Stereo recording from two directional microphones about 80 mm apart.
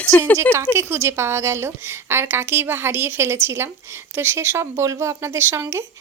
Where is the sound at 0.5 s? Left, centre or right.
Right.